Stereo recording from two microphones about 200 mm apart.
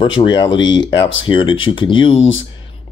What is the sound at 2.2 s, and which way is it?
Speech, 70° left (ahead or behind).